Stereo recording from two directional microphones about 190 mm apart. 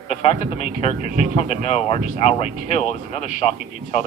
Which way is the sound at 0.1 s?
35° left (ahead or behind).